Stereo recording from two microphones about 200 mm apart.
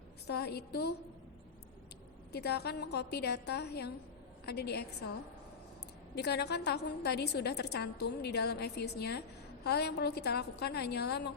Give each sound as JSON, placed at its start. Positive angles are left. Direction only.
{"t": 0.3, "sound": "a woman's voice", "side_deg": 55}
{"t": 2.3, "sound": "a woman's voice", "side_deg": 55}
{"t": 6.1, "sound": "a woman's voice", "side_deg": 55}